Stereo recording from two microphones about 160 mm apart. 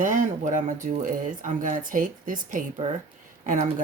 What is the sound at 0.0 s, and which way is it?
Speech, 55° right (ahead or behind).